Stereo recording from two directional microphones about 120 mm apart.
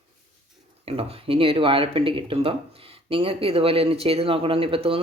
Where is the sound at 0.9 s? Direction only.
55° right (ahead or behind).